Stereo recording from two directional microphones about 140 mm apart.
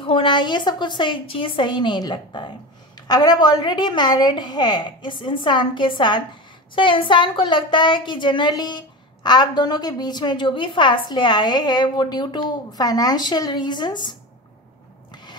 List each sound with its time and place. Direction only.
0.0 s a woman's voice: 35° left (ahead or behind)